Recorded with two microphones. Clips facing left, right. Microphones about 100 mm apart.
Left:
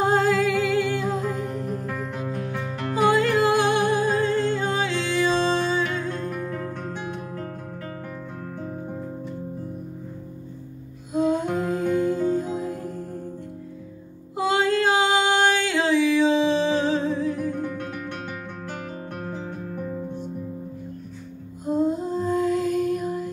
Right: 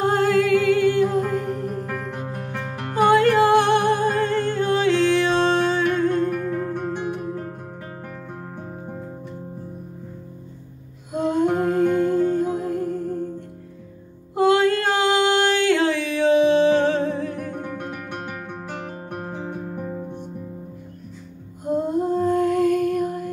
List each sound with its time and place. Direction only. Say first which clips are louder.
0.0 s music: right 1 dB; 55° right (ahead or behind)
2.9 s music: right 4 dB; 55° right (ahead or behind)
11.1 s music: right 2 dB; 55° right (ahead or behind)
14.3 s music: right 4 dB; 55° right (ahead or behind)
19.6 s music: right 1 dB; 25° right (ahead or behind)
21.6 s lullaby: right 2 dB; 55° right (ahead or behind)